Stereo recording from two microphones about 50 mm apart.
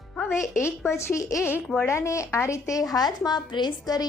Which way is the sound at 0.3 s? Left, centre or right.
Left.